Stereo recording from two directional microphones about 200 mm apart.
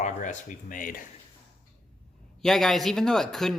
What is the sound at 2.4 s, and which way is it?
Speech, centre (ahead or behind).